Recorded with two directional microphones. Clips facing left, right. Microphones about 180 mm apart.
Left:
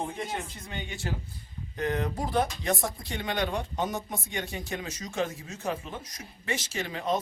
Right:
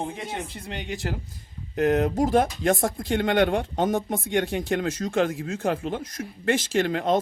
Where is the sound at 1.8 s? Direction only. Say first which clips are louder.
Right 9 dB; 45° right (ahead or behind).